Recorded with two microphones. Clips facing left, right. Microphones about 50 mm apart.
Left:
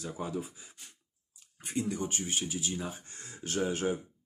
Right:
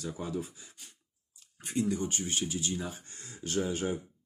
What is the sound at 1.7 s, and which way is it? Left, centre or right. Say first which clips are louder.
Speech: right 2 dB; left.